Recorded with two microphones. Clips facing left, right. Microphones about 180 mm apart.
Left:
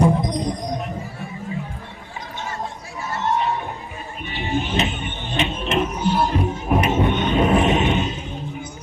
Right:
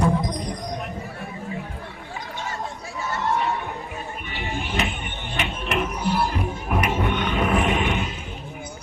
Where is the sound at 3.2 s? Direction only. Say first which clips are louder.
Left 3 dB; 25° left (ahead or behind).